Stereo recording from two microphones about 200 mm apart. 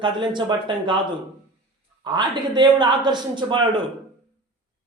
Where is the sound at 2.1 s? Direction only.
20° right (ahead or behind).